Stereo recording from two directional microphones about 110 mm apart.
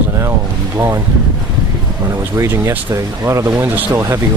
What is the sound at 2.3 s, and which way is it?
Speech, 25° right (ahead or behind).